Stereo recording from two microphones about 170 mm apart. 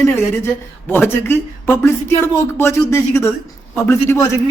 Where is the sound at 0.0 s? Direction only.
15° left (ahead or behind).